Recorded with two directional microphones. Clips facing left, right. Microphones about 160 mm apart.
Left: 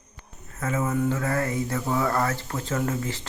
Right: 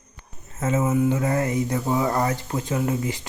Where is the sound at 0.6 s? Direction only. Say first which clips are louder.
Right 4 dB; 25° right (ahead or behind).